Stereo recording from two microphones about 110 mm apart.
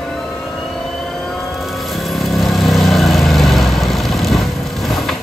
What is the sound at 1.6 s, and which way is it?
Vehicle, centre (ahead or behind).